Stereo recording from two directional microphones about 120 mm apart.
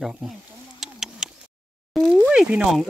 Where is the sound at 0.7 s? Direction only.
5° right (ahead or behind).